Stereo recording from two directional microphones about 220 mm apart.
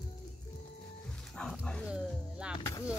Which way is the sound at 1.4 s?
5° left (ahead or behind).